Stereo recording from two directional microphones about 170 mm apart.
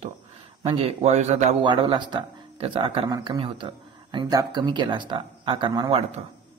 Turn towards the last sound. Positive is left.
turn(degrees=-25)  # may be behind; listen again after turning